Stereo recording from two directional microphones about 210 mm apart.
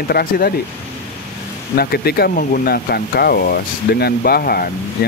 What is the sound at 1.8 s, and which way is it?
Speech, 50° left (ahead or behind).